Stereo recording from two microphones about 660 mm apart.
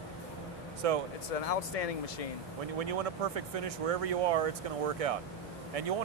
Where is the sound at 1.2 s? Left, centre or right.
Left.